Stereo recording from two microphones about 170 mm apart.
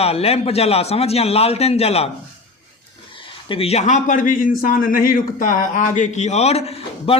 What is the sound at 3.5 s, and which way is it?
A man's voice, 35° left (ahead or behind).